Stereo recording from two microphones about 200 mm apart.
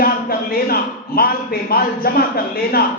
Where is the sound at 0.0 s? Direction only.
50° left (ahead or behind).